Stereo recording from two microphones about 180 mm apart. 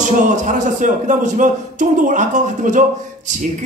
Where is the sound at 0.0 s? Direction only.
45° right (ahead or behind).